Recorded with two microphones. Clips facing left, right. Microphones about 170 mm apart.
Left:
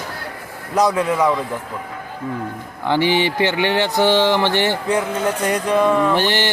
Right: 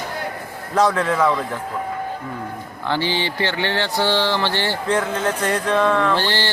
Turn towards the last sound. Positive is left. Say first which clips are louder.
# left 3 dB
turn(degrees=20)  # may be behind; listen again after turning